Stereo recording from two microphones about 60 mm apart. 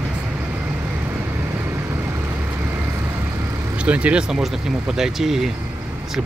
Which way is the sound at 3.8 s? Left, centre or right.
Right.